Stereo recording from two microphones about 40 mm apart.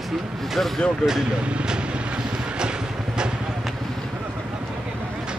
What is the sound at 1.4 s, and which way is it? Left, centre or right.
Vehicle, right.